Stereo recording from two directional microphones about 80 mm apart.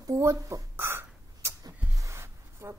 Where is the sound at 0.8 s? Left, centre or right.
Right.